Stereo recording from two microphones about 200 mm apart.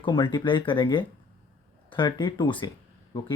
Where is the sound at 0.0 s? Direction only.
20° left (ahead or behind).